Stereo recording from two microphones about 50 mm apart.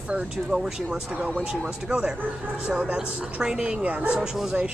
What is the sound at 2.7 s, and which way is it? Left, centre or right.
Speech, right.